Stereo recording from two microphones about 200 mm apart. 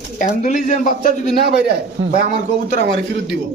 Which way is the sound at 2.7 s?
60° right (ahead or behind).